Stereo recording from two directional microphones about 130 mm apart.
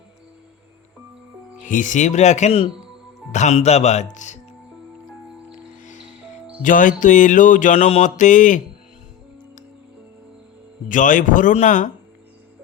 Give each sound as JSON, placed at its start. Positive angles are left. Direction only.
{"t": 1.6, "sound": "speech", "side_deg": 80}
{"t": 6.6, "sound": "mantra", "side_deg": 90}
{"t": 10.8, "sound": "a man's voice", "side_deg": 90}
{"t": 11.5, "sound": "mantra", "side_deg": 70}